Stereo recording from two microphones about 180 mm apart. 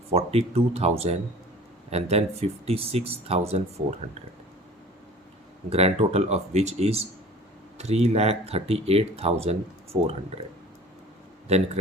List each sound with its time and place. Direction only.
0.1 s speech: 35° right (ahead or behind)
5.7 s speech: 35° right (ahead or behind)
11.4 s speech: 35° right (ahead or behind)